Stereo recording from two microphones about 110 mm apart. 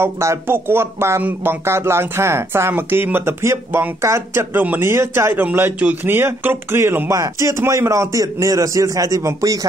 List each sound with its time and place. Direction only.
0.0 s a man's voice: 25° right (ahead or behind)